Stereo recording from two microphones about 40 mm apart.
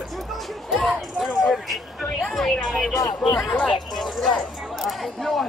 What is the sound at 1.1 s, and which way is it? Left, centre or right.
Speech, centre.